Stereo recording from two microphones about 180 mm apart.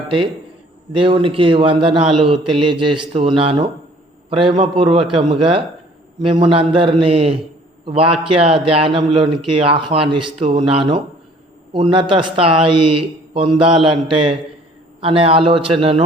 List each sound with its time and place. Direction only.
0.9 s a man's voice: 30° right (ahead or behind)